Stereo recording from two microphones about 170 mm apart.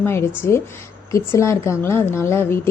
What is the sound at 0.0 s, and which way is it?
Speech, 15° left (ahead or behind).